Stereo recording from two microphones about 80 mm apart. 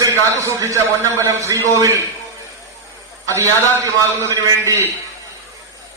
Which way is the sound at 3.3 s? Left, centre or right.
Right.